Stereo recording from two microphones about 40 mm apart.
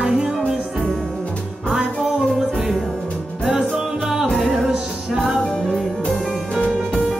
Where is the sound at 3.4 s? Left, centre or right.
Centre.